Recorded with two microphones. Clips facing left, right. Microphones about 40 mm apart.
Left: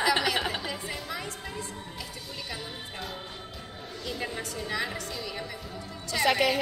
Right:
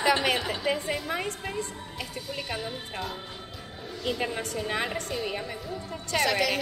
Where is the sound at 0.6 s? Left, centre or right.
Right.